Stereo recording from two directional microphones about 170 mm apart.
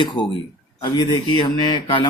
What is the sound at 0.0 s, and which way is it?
Speech, 30° left (ahead or behind).